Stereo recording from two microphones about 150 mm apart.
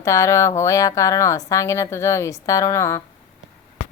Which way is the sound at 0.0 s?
20° left (ahead or behind).